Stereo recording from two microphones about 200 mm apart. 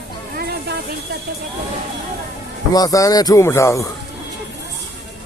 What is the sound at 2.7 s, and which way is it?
Speech, 15° left (ahead or behind).